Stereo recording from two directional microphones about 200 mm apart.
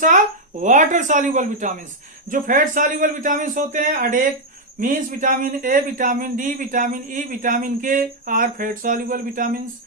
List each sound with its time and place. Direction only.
0.6 s a man's voice: 35° right (ahead or behind)